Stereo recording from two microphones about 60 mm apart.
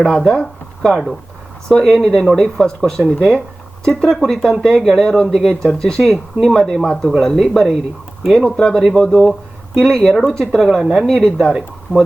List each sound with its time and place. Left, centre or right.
0.0 s speech: centre
6.8 s speech: centre
8.8 s speech: centre